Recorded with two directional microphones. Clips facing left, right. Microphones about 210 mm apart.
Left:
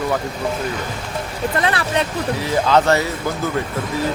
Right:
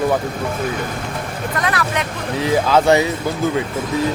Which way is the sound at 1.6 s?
30° left (ahead or behind).